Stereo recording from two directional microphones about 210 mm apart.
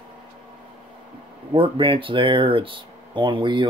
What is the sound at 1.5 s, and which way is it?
Speech, 25° right (ahead or behind).